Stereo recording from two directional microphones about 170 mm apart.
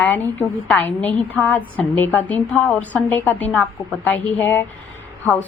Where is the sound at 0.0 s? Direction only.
10° left (ahead or behind).